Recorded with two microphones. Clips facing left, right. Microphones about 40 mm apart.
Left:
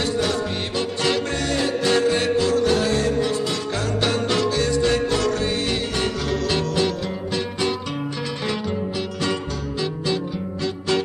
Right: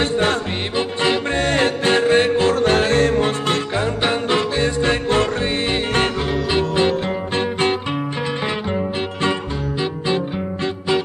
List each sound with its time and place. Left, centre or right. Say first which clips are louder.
0.0 s music: right 4 dB; right
0.7 s music: right 3 dB; right
1.4 s music: right 4 dB; right
3.7 s music: right 3 dB; right
6.3 s music: right 2 dB; right
9.2 s music: right 5 dB; right